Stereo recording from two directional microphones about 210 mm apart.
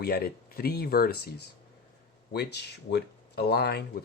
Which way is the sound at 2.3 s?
50° left (ahead or behind).